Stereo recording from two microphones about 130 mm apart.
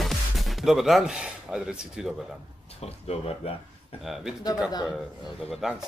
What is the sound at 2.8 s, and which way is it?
Speech, 50° left (ahead or behind).